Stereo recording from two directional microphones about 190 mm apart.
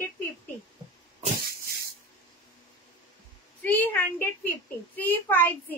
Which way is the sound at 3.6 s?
10° left (ahead or behind).